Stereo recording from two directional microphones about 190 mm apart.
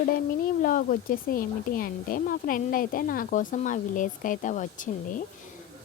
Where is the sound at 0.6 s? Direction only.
45° left (ahead or behind).